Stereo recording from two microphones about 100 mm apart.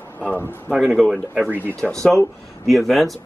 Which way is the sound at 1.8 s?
5° left (ahead or behind).